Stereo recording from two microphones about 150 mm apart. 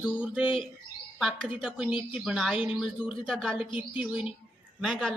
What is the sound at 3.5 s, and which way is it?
Speech, 35° left (ahead or behind).